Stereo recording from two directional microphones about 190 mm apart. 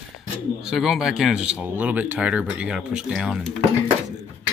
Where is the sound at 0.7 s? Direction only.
Centre (ahead or behind).